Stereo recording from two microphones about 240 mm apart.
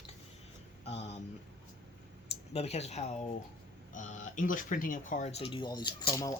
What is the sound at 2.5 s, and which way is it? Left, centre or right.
Speech, left.